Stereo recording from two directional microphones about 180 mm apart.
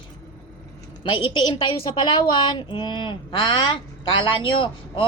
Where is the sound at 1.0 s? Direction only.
30° left (ahead or behind).